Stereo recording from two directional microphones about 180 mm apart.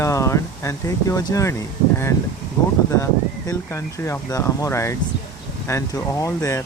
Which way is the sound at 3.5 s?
15° left (ahead or behind).